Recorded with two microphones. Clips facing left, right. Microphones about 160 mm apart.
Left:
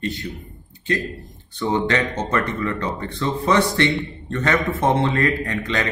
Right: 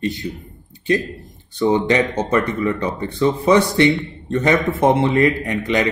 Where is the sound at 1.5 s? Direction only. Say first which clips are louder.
Right 5 dB; 20° right (ahead or behind).